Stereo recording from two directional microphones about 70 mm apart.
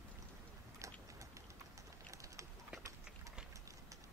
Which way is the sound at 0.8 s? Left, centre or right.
Right.